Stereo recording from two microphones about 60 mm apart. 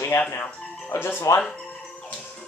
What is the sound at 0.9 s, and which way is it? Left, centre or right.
Speech, left.